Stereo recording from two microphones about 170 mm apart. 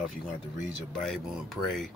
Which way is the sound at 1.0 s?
Centre (ahead or behind).